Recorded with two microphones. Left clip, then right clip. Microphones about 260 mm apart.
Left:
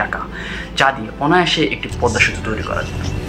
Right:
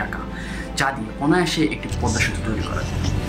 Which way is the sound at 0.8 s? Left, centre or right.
Centre.